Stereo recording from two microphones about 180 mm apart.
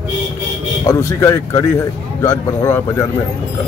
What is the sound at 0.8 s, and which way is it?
Speech, 15° left (ahead or behind).